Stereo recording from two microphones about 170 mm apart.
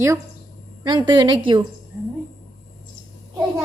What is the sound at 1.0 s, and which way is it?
Speech, 25° right (ahead or behind).